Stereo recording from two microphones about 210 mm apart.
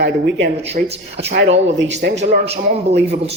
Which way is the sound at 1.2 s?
55° right (ahead or behind).